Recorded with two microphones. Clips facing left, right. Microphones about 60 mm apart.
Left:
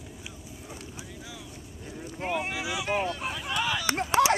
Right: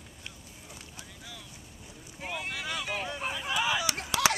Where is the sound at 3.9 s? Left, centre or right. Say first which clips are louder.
Left 8 dB; left.